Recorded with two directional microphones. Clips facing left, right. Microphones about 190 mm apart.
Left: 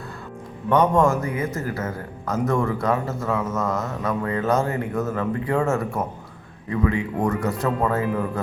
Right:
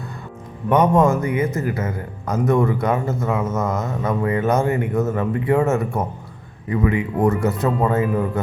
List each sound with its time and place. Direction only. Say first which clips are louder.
0.7 s a man's voice: right 2 dB; 20° right (ahead or behind)